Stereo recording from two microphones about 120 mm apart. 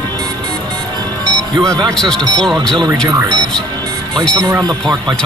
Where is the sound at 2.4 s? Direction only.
5° left (ahead or behind).